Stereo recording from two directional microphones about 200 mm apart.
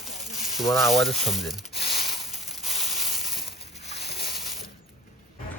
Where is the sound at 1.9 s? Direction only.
Centre (ahead or behind).